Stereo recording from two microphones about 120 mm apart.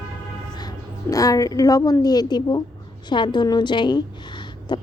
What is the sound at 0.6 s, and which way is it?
A woman's voice, 30° left (ahead or behind).